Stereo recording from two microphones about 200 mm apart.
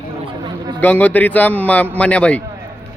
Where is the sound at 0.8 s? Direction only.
5° left (ahead or behind).